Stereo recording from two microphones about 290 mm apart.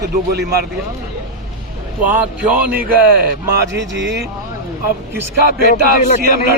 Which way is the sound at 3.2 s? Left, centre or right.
Right.